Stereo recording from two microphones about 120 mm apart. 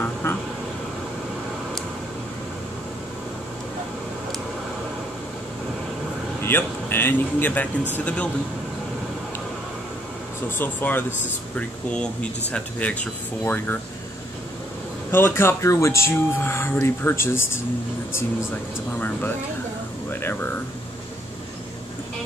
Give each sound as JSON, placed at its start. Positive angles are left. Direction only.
{"t": 0.0, "sound": "vehicle", "side_deg": 20}
{"t": 6.4, "sound": "speech", "side_deg": 20}
{"t": 10.6, "sound": "speech", "side_deg": 15}
{"t": 15.0, "sound": "speech", "side_deg": 20}
{"t": 18.9, "sound": "speech", "side_deg": 15}